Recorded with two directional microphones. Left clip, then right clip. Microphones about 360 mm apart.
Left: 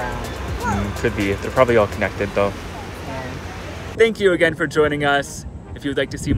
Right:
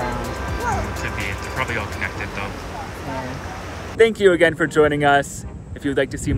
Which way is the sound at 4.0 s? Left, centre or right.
Centre.